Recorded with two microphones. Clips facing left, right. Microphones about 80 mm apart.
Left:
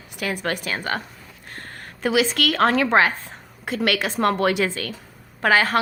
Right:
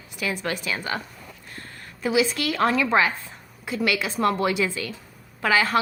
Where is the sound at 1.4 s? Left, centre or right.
Left.